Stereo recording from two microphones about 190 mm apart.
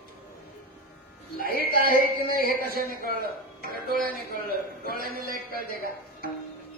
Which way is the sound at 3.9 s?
50° right (ahead or behind).